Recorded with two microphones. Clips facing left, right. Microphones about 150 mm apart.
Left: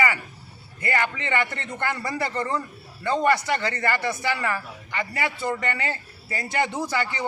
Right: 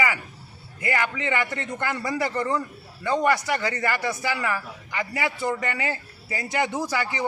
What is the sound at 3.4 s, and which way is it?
A man's voice, 10° right (ahead or behind).